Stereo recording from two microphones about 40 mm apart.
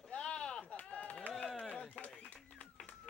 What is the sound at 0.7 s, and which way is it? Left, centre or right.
Chop, left.